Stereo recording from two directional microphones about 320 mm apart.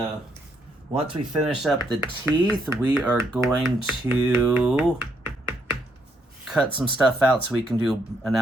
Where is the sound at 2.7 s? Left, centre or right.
Centre.